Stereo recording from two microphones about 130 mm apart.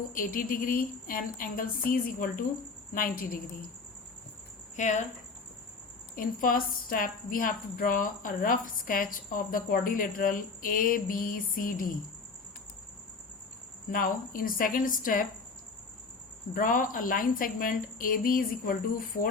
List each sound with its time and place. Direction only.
0.1 s a woman's voice: 90° left
4.8 s speech: 65° left (ahead or behind)
6.1 s a woman's voice: 90° left
13.9 s a woman's voice: 90° left
16.6 s a woman's voice: 90° left